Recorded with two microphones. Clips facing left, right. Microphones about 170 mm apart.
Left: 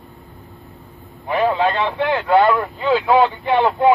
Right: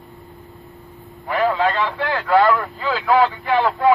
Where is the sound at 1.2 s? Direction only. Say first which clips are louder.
Left 1 dB; 20° left (ahead or behind).